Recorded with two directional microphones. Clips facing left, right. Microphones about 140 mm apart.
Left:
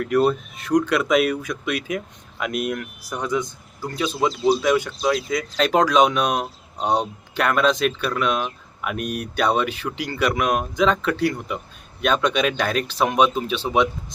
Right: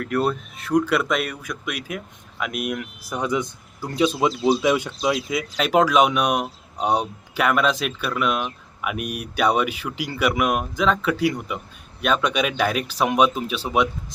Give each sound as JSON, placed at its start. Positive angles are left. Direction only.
{"t": 0.0, "sound": "speech", "side_deg": 0}
{"t": 2.8, "sound": "speech", "side_deg": -15}